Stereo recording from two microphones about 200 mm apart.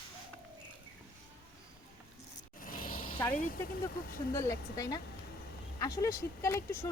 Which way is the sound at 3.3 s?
45° left (ahead or behind).